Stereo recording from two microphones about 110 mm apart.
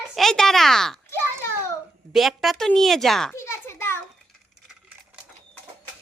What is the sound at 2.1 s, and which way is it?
A woman's voice, centre (ahead or behind).